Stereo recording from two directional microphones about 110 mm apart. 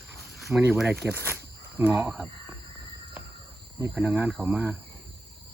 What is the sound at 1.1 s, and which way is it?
Speech, 15° right (ahead or behind).